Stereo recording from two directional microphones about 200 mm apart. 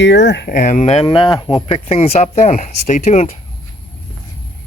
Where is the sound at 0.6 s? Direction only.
40° left (ahead or behind).